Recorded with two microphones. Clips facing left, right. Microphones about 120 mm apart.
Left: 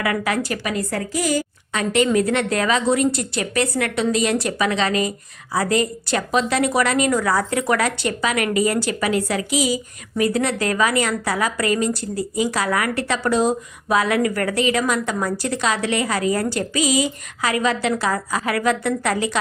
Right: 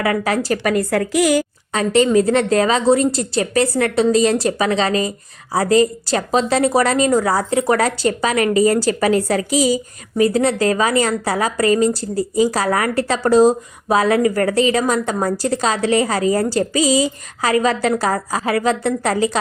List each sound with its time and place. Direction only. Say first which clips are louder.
0.0 s a woman's voice: right 3 dB; 35° right (ahead or behind)
0.6 s a woman's voice: right 7 dB; 55° right (ahead or behind); by 1.5 s 70° right (ahead or behind)
1.7 s a woman's voice: right 4 dB; 35° right (ahead or behind)